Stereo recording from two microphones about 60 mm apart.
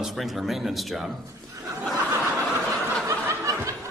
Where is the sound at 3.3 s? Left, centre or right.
Right.